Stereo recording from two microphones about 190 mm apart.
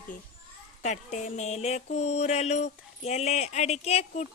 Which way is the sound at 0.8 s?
40° left (ahead or behind).